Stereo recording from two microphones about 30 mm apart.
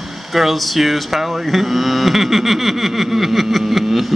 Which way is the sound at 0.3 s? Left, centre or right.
Centre.